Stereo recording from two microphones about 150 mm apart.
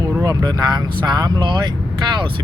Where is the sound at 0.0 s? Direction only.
25° right (ahead or behind).